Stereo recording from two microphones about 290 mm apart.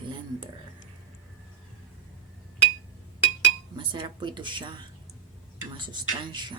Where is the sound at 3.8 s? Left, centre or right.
Centre.